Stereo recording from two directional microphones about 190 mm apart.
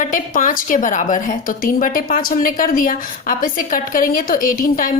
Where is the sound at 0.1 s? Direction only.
45° left (ahead or behind).